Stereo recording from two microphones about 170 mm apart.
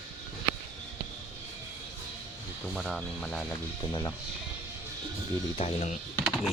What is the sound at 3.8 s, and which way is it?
Speech, 25° left (ahead or behind).